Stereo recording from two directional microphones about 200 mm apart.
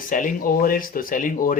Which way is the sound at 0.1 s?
40° left (ahead or behind).